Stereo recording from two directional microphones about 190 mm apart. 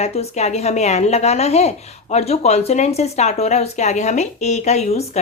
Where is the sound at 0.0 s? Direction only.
35° left (ahead or behind).